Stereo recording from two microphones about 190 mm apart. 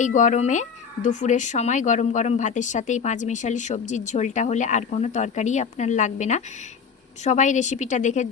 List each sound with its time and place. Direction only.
0.0 s speech: 40° left (ahead or behind)